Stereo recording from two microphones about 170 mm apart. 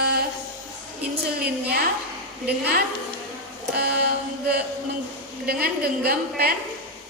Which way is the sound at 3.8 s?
70° right (ahead or behind).